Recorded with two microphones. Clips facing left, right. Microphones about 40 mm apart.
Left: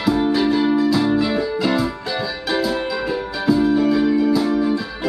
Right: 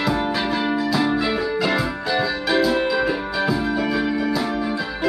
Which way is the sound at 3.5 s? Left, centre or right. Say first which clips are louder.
Left 9 dB; centre.